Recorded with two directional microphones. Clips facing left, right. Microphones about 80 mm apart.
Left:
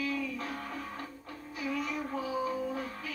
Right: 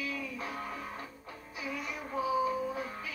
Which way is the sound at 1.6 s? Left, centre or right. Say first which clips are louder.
Left 5 dB; centre.